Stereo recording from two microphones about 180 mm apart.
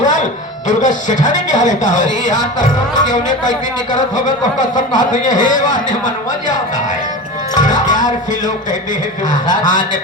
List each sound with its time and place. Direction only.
0.8 s speech: 45° left (ahead or behind)
2.9 s speech: 20° left (ahead or behind)
4.9 s speech: 45° left (ahead or behind)
7.6 s music: 45° left (ahead or behind)
9.5 s speech: 45° left (ahead or behind)